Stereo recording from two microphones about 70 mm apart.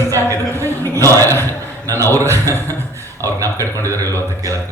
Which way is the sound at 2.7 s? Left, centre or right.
Right.